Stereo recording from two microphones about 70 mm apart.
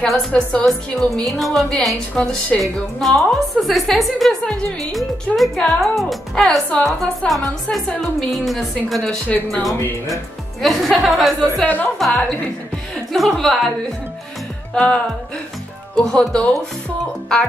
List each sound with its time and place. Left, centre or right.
0.0 s a woman's voice: centre
0.3 s a woman's voice: centre
0.7 s a woman's voice: centre
11.6 s a woman's voice: left
12.0 s a woman's voice: centre
14.7 s music: centre
16.0 s speech: centre